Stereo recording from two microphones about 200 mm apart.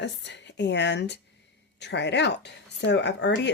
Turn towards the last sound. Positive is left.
turn(degrees=60)  # may be behind; listen again after turning